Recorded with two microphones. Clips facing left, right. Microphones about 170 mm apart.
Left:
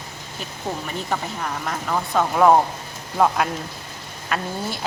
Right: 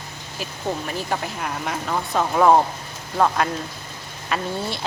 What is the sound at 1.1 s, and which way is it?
Speech, 5° right (ahead or behind).